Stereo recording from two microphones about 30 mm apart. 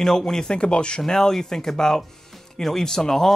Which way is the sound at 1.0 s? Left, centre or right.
Centre.